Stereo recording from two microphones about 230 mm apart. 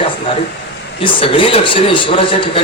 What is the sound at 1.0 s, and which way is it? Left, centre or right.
Speech, left.